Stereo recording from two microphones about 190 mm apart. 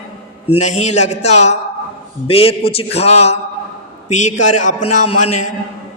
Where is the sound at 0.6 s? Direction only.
35° left (ahead or behind).